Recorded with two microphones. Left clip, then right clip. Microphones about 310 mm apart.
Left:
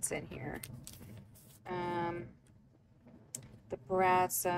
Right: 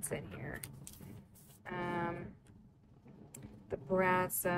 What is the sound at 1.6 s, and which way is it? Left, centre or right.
Speech, centre.